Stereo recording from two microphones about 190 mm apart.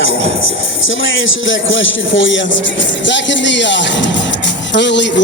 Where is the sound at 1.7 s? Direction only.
80° left.